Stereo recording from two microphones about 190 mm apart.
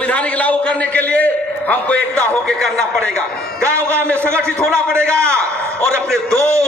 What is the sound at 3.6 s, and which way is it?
Speech, 15° right (ahead or behind).